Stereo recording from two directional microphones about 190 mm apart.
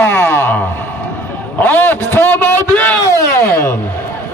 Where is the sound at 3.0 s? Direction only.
15° left (ahead or behind).